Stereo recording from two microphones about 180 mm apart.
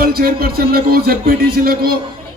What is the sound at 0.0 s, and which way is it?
A man's voice, 55° right (ahead or behind).